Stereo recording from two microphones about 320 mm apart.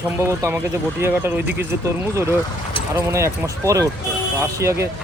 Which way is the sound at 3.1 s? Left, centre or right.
Centre.